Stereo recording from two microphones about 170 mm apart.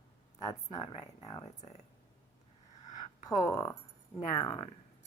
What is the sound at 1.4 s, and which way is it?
Speech, 40° left (ahead or behind).